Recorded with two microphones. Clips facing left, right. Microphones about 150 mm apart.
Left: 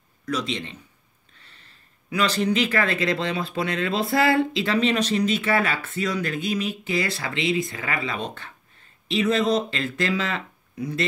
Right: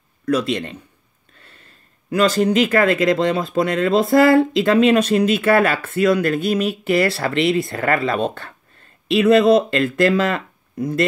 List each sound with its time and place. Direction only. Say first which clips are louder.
0.2 s a man's voice: right 8 dB; 55° right (ahead or behind)
2.0 s speech: right 6 dB; 45° right (ahead or behind)